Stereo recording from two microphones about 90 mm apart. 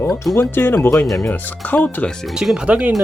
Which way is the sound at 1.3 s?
20° left (ahead or behind).